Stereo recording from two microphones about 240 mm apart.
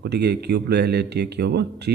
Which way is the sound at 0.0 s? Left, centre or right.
Right.